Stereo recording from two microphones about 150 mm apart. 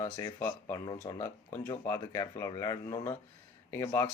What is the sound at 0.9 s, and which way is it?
Speech, 30° left (ahead or behind).